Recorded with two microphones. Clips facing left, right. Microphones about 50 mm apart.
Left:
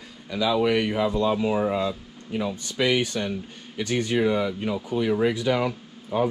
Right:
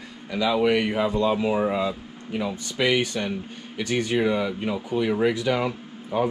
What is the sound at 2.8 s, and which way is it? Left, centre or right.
Speech, right.